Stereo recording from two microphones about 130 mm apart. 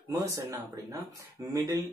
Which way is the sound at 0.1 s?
20° right (ahead or behind).